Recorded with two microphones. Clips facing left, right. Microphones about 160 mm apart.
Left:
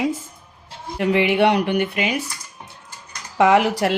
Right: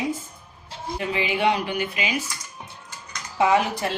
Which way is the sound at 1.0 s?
70° left (ahead or behind).